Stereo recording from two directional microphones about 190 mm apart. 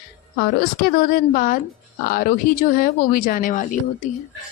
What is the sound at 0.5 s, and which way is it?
A woman's voice, 55° left (ahead or behind).